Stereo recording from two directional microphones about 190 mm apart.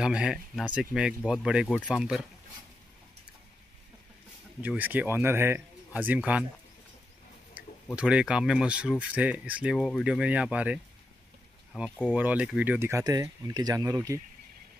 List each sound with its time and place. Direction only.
0.0 s speech: 5° right (ahead or behind)
4.6 s speech: 10° right (ahead or behind)
7.5 s speech: 5° right (ahead or behind)